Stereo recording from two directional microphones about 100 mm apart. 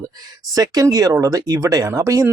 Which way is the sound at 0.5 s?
40° right (ahead or behind).